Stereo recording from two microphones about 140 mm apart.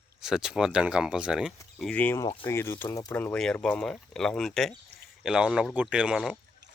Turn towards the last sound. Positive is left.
turn(degrees=-5)  # may be behind; listen again after turning